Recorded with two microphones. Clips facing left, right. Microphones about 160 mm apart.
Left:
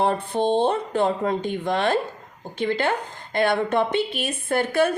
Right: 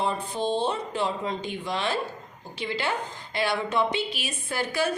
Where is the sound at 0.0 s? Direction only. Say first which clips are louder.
Left 6 dB; 60° left (ahead or behind).